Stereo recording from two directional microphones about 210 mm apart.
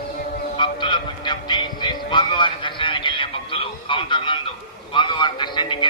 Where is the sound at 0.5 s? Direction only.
20° left (ahead or behind).